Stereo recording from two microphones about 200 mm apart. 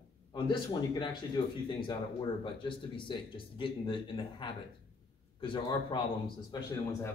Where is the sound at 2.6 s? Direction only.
25° left (ahead or behind).